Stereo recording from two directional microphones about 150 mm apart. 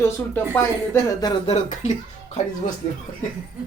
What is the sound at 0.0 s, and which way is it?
A man's voice, 15° left (ahead or behind).